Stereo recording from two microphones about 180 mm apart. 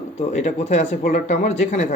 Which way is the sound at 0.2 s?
40° left (ahead or behind).